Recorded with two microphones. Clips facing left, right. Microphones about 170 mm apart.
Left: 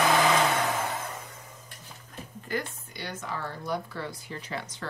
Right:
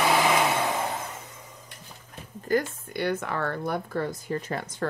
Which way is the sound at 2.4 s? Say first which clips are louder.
Right 8 dB; 50° right (ahead or behind).